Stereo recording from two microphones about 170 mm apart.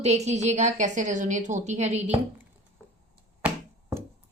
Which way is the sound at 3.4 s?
5° right (ahead or behind).